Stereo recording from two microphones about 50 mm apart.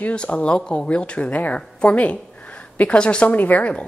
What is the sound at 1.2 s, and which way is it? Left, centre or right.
A woman's voice, left.